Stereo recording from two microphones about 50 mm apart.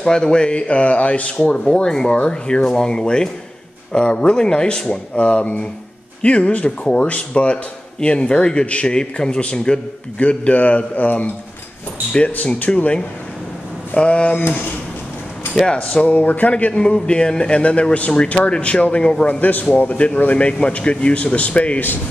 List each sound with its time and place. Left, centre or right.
0.0 s a man's voice: centre
15.5 s a man's voice: centre
16.8 s a man's voice: centre
19.2 s a man's voice: left